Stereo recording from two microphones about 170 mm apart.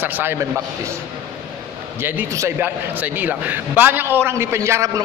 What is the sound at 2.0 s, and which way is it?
A man's voice, 15° right (ahead or behind).